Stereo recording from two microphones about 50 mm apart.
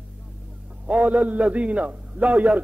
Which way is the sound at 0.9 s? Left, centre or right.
Right.